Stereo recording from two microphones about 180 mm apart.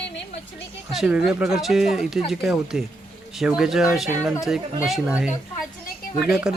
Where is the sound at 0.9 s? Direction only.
5° right (ahead or behind).